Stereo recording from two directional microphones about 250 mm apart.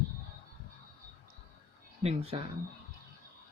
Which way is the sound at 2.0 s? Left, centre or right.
Right.